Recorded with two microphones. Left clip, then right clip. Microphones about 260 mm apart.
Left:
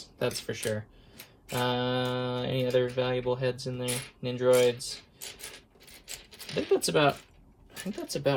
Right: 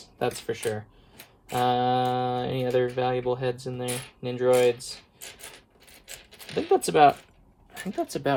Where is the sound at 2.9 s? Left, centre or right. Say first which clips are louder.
Right 3 dB; right.